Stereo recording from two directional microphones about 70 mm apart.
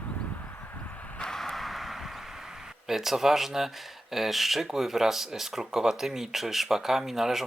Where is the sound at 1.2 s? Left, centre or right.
Centre.